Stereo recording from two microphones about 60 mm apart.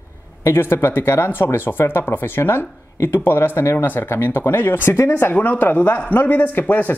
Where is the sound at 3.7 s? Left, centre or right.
Left.